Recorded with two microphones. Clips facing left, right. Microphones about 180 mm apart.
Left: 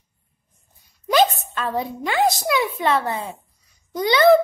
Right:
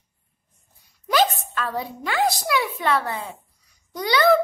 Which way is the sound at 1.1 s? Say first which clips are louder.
Left 3 dB; 20° left (ahead or behind).